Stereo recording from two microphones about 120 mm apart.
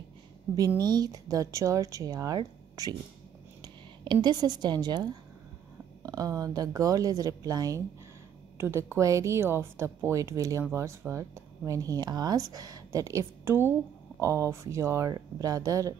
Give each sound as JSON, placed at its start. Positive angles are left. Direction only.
{"t": 0.7, "sound": "speech", "side_deg": -35}
{"t": 8.5, "sound": "speech", "side_deg": -20}